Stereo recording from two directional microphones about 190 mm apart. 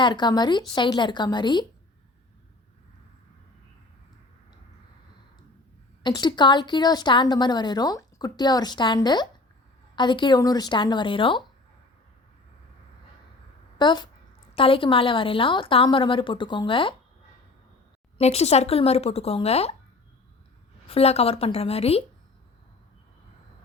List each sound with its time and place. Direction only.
0.0 s a woman's voice: 25° left (ahead or behind)
6.0 s a woman's voice: 25° left (ahead or behind)
13.7 s a woman's voice: 25° left (ahead or behind)
18.2 s speech: 35° left (ahead or behind)
20.8 s speech: 30° left (ahead or behind)